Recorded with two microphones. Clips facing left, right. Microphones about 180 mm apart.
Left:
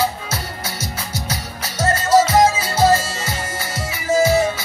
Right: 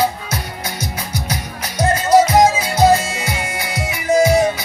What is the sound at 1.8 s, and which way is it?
Music, 15° right (ahead or behind).